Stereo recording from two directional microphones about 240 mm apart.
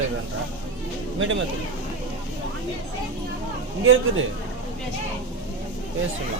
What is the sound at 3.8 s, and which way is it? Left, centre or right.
Speech, right.